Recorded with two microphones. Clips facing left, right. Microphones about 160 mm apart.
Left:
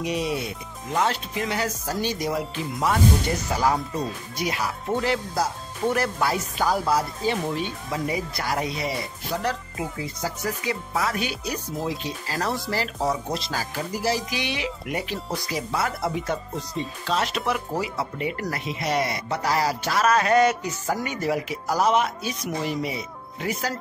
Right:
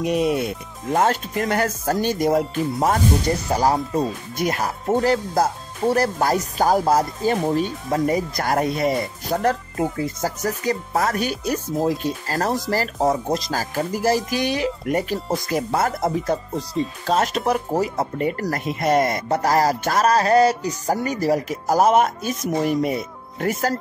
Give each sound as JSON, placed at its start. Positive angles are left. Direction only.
{"t": 0.0, "sound": "speech", "side_deg": -50}